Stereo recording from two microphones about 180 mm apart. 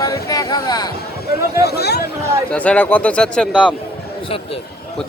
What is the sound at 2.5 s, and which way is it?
Speech, 5° left (ahead or behind).